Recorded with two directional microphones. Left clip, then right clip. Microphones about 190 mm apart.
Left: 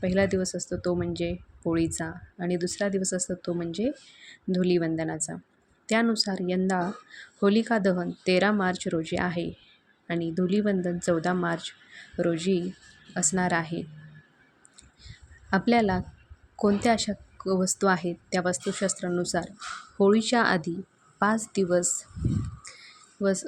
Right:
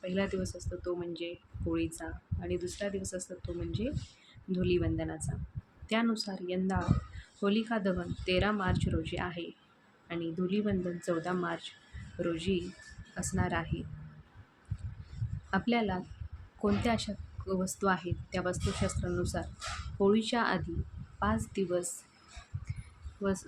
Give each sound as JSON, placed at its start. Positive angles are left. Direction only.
{"t": 0.0, "sound": "a woman's voice", "side_deg": 35}
{"t": 15.4, "sound": "speech", "side_deg": 35}
{"t": 23.2, "sound": "speech", "side_deg": 30}